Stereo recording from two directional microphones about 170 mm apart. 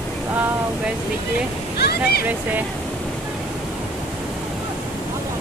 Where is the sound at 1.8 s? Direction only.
65° left (ahead or behind).